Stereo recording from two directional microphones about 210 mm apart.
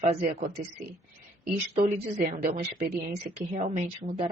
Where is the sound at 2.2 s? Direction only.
45° right (ahead or behind).